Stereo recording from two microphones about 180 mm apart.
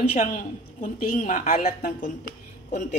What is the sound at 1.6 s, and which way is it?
Speech, 55° left (ahead or behind).